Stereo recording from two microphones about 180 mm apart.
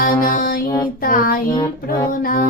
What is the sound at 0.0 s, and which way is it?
Music, 50° left (ahead or behind).